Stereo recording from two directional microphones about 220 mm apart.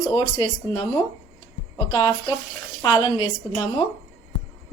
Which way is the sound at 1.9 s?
20° left (ahead or behind).